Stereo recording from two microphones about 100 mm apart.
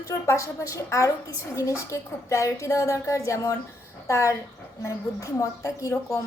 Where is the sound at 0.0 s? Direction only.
30° left (ahead or behind).